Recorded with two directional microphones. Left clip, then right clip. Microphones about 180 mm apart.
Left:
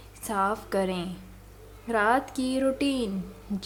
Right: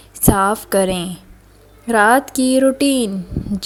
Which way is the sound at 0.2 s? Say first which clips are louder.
Right 12 dB; 40° right (ahead or behind).